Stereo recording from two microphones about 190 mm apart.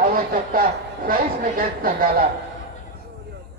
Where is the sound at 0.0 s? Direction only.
50° right (ahead or behind).